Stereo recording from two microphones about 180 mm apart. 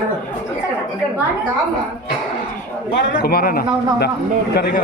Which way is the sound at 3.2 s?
55° left (ahead or behind).